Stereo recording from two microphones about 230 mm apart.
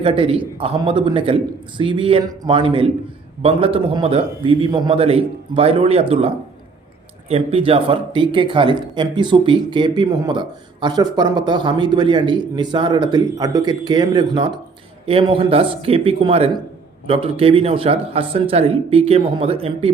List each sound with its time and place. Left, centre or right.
0.0 s speech: right